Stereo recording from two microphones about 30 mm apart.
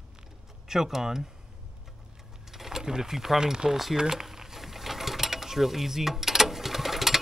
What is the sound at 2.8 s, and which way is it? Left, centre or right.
Speech, right.